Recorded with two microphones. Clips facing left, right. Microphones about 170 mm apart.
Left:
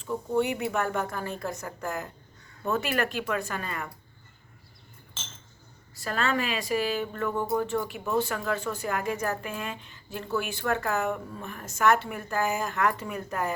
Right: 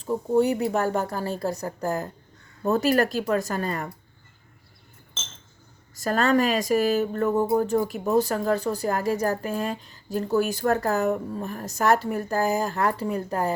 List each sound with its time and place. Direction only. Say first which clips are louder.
0.0 s speech: right 5 dB; 40° right (ahead or behind)
5.9 s speech: right 7 dB; 45° right (ahead or behind)